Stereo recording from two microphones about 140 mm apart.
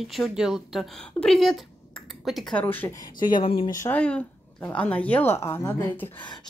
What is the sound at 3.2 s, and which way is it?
Speech, 35° left (ahead or behind).